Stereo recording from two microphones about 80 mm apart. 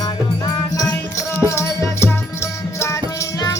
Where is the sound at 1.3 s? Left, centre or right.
Left.